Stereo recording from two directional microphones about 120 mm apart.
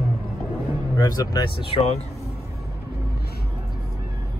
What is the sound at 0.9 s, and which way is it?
Speech, 30° left (ahead or behind).